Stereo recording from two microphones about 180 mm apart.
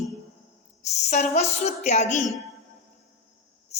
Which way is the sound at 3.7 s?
40° left (ahead or behind).